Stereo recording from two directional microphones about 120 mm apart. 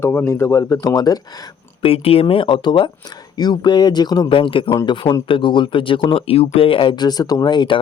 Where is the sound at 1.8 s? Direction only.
50° left (ahead or behind).